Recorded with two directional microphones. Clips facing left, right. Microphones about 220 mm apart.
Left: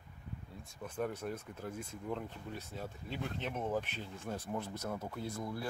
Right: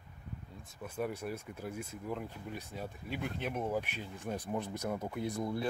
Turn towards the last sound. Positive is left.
turn(degrees=-20)  # may be behind; listen again after turning